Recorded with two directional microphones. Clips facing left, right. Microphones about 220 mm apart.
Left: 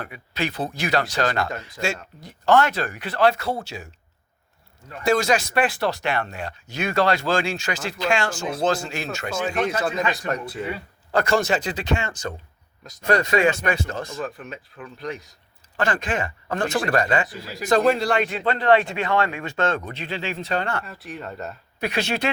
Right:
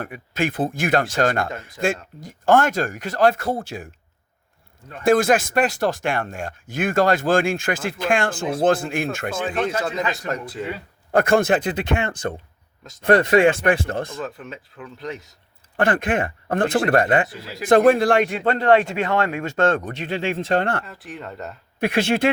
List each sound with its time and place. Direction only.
0.0 s speech: 50° right (ahead or behind)
5.0 s speech: 50° right (ahead or behind)
9.6 s speech: 25° right (ahead or behind)
11.1 s speech: 55° right (ahead or behind)
14.3 s speech: 25° right (ahead or behind)
15.8 s speech: 55° right (ahead or behind)
17.2 s speech: 25° right (ahead or behind)
17.7 s speech: 50° right (ahead or behind)
20.8 s speech: 20° right (ahead or behind)
21.8 s speech: 55° right (ahead or behind)